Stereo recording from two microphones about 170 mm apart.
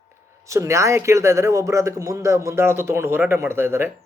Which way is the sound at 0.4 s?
15° right (ahead or behind).